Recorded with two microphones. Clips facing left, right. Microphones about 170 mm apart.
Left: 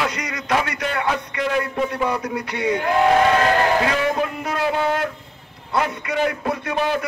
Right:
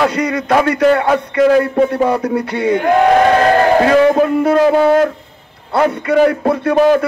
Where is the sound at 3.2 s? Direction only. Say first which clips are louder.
Right 6 dB; 40° right (ahead or behind).